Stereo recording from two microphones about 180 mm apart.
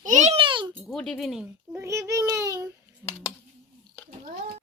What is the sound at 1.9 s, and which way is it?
Child singing, 15° right (ahead or behind).